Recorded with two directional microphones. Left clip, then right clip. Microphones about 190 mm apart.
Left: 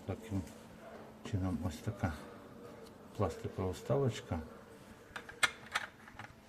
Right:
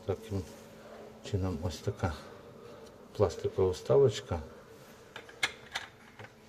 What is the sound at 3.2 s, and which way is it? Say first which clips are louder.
Speech: right 9 dB; 15° right (ahead or behind).